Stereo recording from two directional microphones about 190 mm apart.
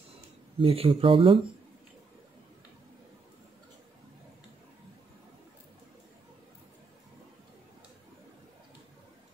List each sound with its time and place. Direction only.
0.6 s speech: 30° right (ahead or behind)